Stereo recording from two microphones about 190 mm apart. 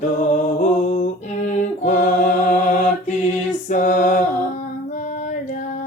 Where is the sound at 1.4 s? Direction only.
40° left (ahead or behind).